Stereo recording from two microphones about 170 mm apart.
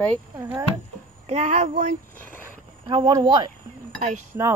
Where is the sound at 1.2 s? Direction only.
45° right (ahead or behind).